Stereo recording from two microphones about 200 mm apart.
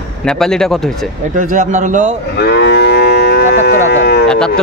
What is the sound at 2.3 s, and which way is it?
Moo, 55° left (ahead or behind).